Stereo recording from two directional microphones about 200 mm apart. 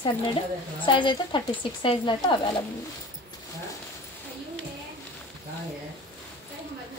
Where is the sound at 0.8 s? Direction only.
25° left (ahead or behind).